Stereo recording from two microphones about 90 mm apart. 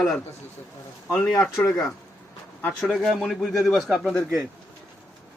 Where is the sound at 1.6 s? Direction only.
35° left (ahead or behind).